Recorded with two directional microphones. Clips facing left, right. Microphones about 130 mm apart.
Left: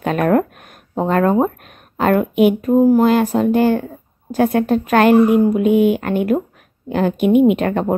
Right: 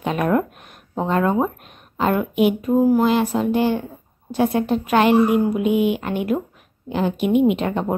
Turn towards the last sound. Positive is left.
turn(degrees=55)  # may be behind; listen again after turning